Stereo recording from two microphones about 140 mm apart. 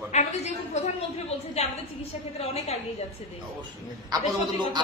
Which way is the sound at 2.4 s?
50° left (ahead or behind).